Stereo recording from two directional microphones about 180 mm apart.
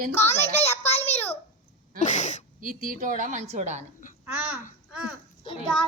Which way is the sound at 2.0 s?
40° left (ahead or behind).